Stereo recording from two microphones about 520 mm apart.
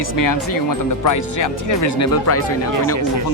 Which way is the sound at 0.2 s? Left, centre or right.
Left.